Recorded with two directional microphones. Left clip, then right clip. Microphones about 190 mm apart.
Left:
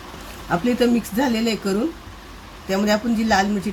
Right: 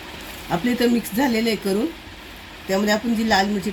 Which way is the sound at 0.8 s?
15° left (ahead or behind).